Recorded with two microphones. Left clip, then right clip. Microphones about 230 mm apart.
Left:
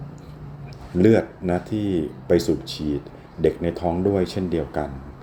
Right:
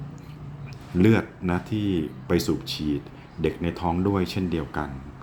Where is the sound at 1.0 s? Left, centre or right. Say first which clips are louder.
Left 4 dB; centre.